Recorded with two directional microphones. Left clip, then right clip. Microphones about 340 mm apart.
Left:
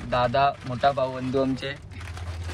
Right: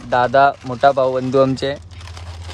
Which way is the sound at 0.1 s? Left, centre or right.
Centre.